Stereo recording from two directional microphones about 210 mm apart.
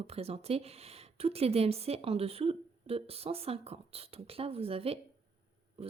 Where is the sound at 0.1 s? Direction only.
30° right (ahead or behind).